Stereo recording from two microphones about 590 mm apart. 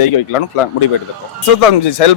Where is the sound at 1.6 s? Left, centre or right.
Left.